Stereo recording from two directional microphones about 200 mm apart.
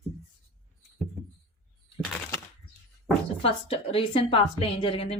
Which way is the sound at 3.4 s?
30° left (ahead or behind).